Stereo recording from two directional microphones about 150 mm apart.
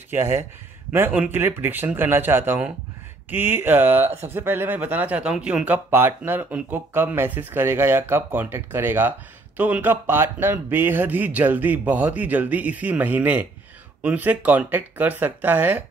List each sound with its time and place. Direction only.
0.1 s speech: 15° right (ahead or behind)